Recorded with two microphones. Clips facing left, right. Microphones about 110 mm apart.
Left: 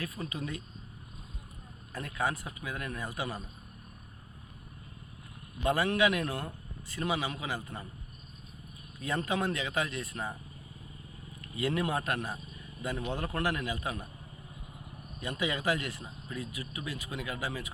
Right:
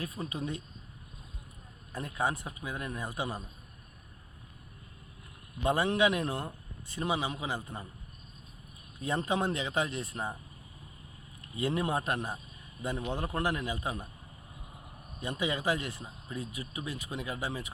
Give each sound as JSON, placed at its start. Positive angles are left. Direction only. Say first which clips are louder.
{"t": 0.0, "sound": "speech", "louder": "right 1 dB", "side_deg": -25}
{"t": 1.9, "sound": "speech", "louder": "right 1 dB", "side_deg": -20}
{"t": 5.6, "sound": "speech", "louder": "even", "side_deg": -20}
{"t": 9.0, "sound": "speech", "louder": "right 1 dB", "side_deg": -20}
{"t": 11.5, "sound": "a man's voice", "louder": "even", "side_deg": -25}
{"t": 15.2, "sound": "speech", "louder": "even", "side_deg": -20}